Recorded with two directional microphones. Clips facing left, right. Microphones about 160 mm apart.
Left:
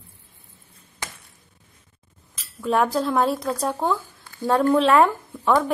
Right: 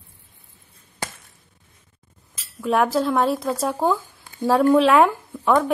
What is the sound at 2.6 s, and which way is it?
A woman's voice, centre (ahead or behind).